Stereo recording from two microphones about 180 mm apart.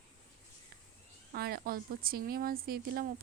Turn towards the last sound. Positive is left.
turn(degrees=-60)  # may be behind; listen again after turning